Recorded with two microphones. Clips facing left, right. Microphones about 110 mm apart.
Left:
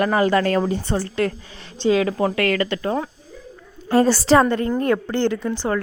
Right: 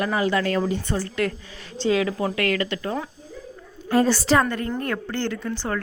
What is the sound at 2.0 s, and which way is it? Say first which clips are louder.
A woman's voice: left 4 dB; 40° left (ahead or behind).